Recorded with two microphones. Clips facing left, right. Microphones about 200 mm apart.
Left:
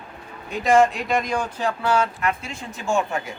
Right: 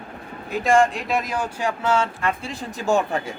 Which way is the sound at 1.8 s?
25° right (ahead or behind).